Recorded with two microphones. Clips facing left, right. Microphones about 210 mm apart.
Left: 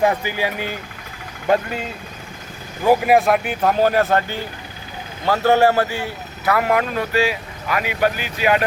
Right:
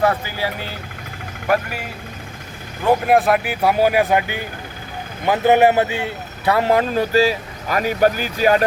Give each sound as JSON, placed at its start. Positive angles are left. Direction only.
{"t": 0.0, "sound": "speech", "side_deg": 15}
{"t": 2.8, "sound": "a man's voice", "side_deg": 5}